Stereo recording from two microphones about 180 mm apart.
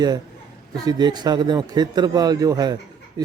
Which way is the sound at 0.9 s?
25° right (ahead or behind).